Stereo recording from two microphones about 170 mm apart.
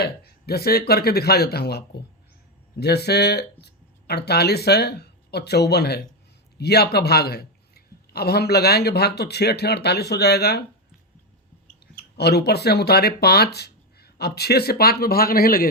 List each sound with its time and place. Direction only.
0.0 s a man's voice: 70° left (ahead or behind)
12.1 s a man's voice: 75° left (ahead or behind)